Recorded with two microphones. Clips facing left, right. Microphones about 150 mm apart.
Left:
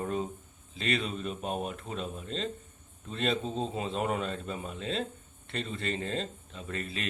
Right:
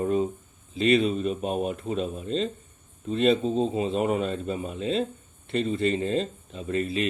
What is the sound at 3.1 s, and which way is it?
Speech, 5° right (ahead or behind).